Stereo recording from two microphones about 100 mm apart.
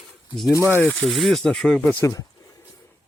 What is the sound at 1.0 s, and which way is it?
Speech, centre (ahead or behind).